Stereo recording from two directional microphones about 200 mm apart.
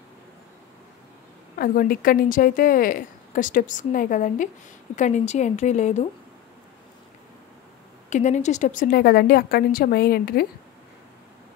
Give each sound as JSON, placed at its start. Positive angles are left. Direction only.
{"t": 1.6, "sound": "a woman's voice", "side_deg": 45}
{"t": 8.1, "sound": "a woman's voice", "side_deg": 35}